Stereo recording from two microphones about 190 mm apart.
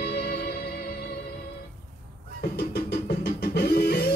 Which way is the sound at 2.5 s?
60° left (ahead or behind).